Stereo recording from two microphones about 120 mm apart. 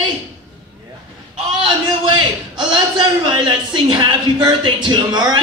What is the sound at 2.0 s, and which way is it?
A man's voice, 40° right (ahead or behind).